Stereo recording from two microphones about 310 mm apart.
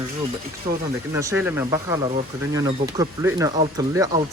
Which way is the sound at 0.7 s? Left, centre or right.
Centre.